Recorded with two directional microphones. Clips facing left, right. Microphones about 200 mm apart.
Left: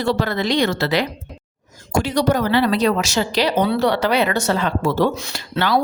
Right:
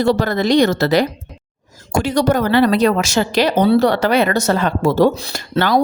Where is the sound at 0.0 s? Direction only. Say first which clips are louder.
Right 4 dB; 45° right (ahead or behind).